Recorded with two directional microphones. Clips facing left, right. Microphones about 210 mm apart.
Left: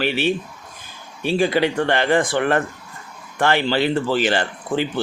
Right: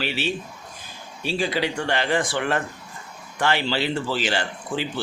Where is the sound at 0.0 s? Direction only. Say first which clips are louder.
Left 6 dB; 55° left (ahead or behind).